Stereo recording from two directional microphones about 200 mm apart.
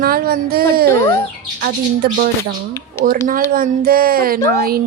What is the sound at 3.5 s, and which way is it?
Speech, 45° right (ahead or behind).